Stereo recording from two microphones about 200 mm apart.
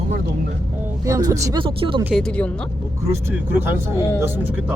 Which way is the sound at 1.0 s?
15° right (ahead or behind).